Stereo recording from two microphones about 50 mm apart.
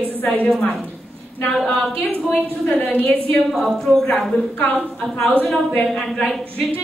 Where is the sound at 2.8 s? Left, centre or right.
Left.